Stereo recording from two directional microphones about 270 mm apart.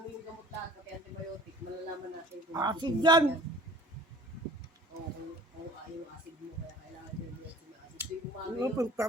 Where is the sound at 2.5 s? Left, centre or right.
Centre.